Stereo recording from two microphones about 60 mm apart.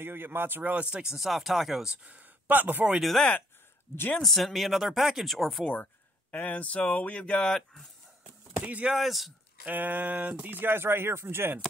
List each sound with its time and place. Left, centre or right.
0.0 s speech: right
0.8 s speech: centre
1.1 s speech: centre
2.0 s speech: right
3.0 s speech: centre
6.3 s speech: left; by 7.9 s centre
8.6 s speech: right
8.9 s speech: centre
9.7 s speech: right